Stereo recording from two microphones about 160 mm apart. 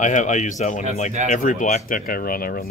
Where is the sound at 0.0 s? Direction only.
50° left (ahead or behind).